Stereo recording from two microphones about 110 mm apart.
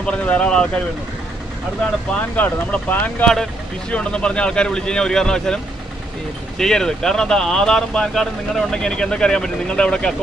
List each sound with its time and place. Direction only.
0.0 s speech: 10° left (ahead or behind)
2.1 s speech: 15° left (ahead or behind)
6.6 s speech: 5° left (ahead or behind)